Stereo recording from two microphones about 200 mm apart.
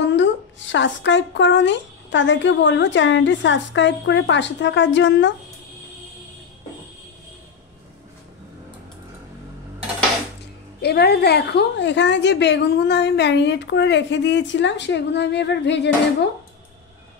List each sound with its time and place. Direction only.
0.0 s a woman's voice: 65° left (ahead or behind)
10.8 s a woman's voice: 55° left (ahead or behind)